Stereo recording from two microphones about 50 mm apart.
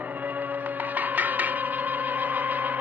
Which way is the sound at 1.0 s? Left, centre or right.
Right.